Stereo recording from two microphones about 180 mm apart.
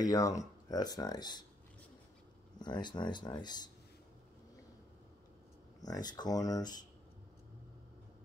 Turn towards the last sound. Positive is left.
turn(degrees=20)  # may be behind; listen again after turning